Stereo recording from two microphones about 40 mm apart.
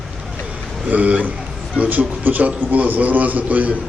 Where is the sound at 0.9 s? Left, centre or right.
Right.